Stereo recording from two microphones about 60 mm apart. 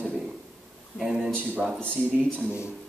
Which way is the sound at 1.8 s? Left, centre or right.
Centre.